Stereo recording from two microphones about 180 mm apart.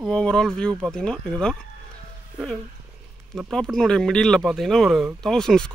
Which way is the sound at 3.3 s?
Centre (ahead or behind).